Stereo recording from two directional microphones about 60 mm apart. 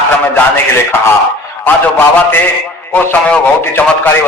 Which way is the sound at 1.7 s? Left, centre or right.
Left.